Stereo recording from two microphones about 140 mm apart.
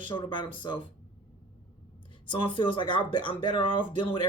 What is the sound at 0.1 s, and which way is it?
Speech, 35° left (ahead or behind).